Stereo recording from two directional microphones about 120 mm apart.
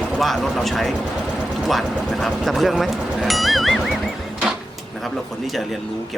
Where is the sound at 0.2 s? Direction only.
Centre (ahead or behind).